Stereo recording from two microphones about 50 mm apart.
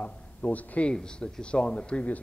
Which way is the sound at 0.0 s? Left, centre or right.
Left.